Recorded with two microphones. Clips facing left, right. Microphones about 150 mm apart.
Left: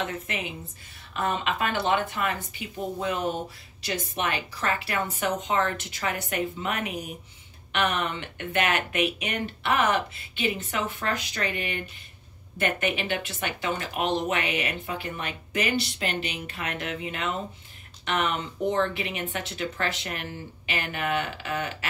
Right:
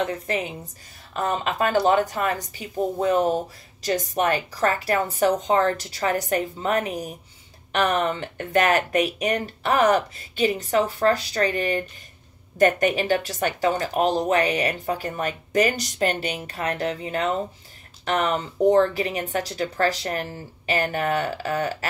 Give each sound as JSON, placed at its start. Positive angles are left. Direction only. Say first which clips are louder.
{"t": 0.0, "sound": "speech", "louder": "right 6 dB", "side_deg": -35}